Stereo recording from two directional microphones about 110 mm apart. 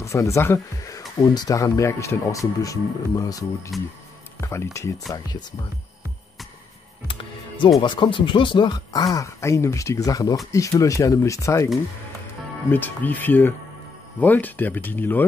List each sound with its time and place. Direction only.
0.0 s speech: 25° left (ahead or behind)
1.2 s speech: 40° left (ahead or behind)
7.1 s music: 50° left (ahead or behind)
7.8 s speech: 45° left (ahead or behind); by 11.7 s 30° left (ahead or behind)
12.7 s speech: 15° left (ahead or behind)